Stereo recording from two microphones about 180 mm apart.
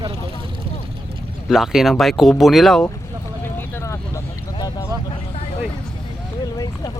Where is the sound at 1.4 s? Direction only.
Centre (ahead or behind).